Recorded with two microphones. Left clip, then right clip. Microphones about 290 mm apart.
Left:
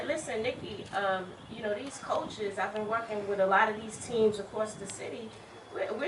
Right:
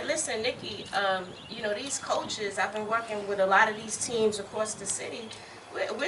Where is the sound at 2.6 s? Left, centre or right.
Centre.